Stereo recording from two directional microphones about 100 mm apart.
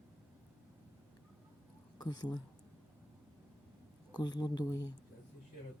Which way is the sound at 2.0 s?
45° left (ahead or behind).